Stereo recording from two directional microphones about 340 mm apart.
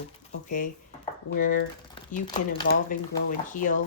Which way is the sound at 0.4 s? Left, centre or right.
Left.